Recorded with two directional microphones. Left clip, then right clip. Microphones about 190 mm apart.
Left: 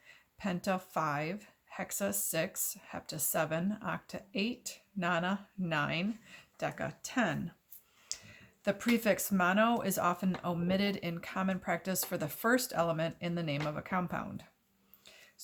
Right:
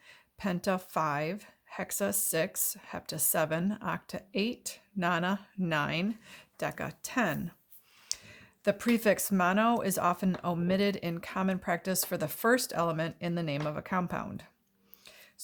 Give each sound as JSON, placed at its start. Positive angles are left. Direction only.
{"t": 0.1, "sound": "speech", "side_deg": -45}
{"t": 15.0, "sound": "whispering", "side_deg": -45}